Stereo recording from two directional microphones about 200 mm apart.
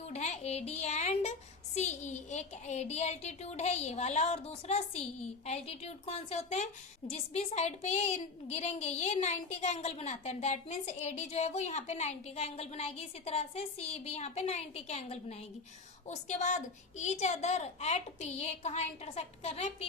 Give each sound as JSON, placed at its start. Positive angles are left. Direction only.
{"t": 0.1, "sound": "a child's voice", "side_deg": 35}